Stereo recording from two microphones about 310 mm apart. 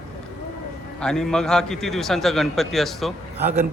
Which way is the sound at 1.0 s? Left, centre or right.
Centre.